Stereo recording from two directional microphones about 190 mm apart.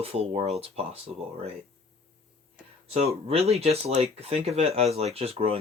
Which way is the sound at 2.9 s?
30° right (ahead or behind).